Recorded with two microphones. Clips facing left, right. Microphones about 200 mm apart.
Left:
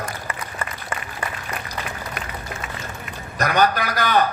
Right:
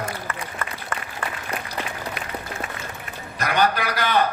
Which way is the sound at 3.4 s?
45° left (ahead or behind).